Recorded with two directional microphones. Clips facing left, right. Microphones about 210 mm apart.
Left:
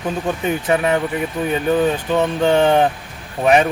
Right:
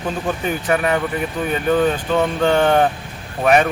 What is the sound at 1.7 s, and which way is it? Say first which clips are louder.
Speech: right 1 dB; 20° left (ahead or behind).